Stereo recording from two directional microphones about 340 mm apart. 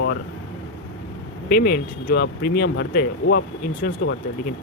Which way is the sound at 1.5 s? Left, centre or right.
Left.